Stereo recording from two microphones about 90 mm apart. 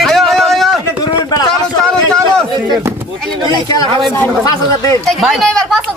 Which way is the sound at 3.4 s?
45° left (ahead or behind).